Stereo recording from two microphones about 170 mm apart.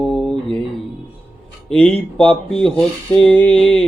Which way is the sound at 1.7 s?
10° left (ahead or behind).